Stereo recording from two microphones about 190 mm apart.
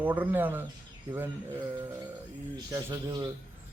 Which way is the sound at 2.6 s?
20° right (ahead or behind).